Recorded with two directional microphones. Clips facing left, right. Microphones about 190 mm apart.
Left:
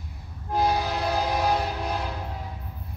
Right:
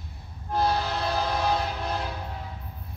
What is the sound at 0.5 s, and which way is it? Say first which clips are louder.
Train: left 1 dB; 15° left (ahead or behind).